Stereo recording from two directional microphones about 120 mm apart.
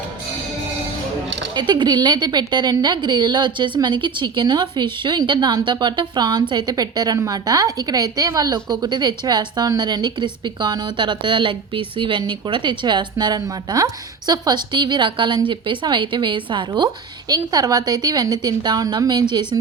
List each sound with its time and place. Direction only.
1.5 s a woman's voice: 40° right (ahead or behind)